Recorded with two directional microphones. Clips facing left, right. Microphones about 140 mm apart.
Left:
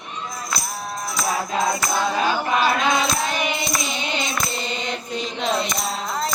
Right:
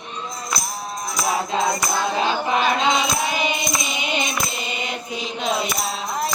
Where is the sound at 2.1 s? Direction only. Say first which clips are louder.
Right 1 dB; 20° right (ahead or behind).